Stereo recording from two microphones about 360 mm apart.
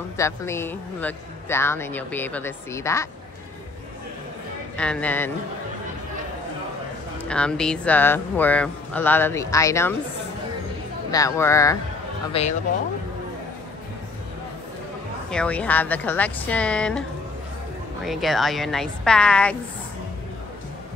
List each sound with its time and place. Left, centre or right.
0.2 s speech: centre
4.7 s speech: centre
7.2 s speech: centre
11.1 s speech: centre
15.2 s speech: centre
18.0 s speech: centre